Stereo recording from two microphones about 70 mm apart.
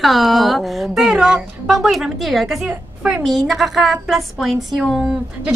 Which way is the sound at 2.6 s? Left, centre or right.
Centre.